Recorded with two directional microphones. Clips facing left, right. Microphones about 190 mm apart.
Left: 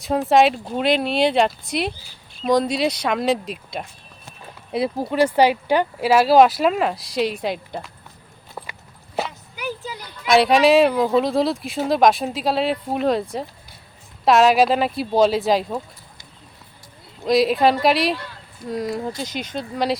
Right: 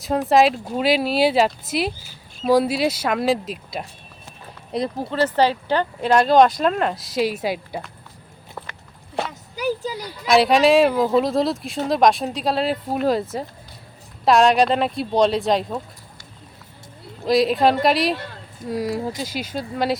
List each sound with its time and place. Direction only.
0.0 s speech: centre (ahead or behind)
4.7 s speech: 10° left (ahead or behind)
8.6 s walk: 10° left (ahead or behind)
9.2 s a sound: centre (ahead or behind)
9.6 s a sound: 40° right (ahead or behind)
10.2 s speech: centre (ahead or behind)
17.2 s speech: centre (ahead or behind)